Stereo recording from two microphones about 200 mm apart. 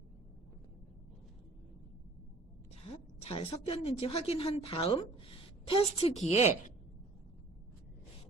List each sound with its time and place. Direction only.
3.2 s a woman's voice: 30° left (ahead or behind)